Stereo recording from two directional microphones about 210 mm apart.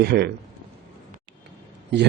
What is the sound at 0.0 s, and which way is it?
Speech, 50° right (ahead or behind).